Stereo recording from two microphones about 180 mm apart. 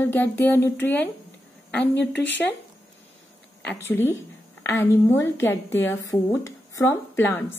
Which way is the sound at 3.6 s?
10° left (ahead or behind).